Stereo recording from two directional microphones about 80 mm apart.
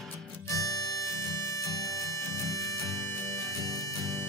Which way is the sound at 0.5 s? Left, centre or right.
Left.